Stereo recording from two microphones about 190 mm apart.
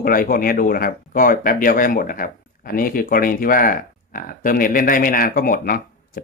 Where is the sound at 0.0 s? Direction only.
50° left (ahead or behind).